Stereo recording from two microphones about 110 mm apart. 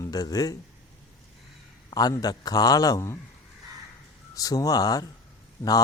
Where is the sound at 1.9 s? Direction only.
35° left (ahead or behind).